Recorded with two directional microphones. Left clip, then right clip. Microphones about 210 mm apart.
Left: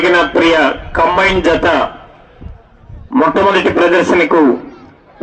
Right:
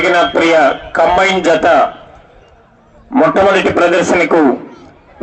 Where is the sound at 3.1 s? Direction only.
20° right (ahead or behind).